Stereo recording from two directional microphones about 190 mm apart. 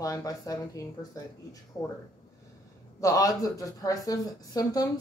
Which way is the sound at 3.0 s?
20° left (ahead or behind).